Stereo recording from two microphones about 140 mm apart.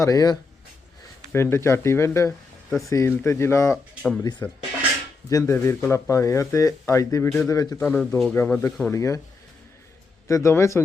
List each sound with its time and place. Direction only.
0.0 s speech: 25° left (ahead or behind)
2.6 s speech: centre (ahead or behind)
2.9 s speech: 20° left (ahead or behind)
4.2 s speech: 30° left (ahead or behind)
7.8 s speech: 10° left (ahead or behind)
8.9 s speech: 20° left (ahead or behind)
10.2 s speech: 20° left (ahead or behind)